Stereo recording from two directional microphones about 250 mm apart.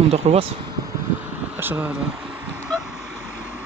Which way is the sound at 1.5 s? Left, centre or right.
Centre.